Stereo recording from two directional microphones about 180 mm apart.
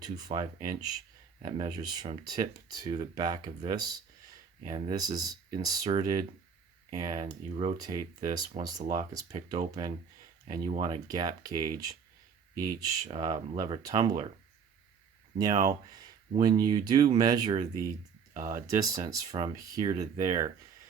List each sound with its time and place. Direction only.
0.0 s speech: 20° right (ahead or behind)
7.5 s speech: 35° right (ahead or behind)
7.8 s speech: 20° right (ahead or behind)
15.4 s speech: 20° right (ahead or behind)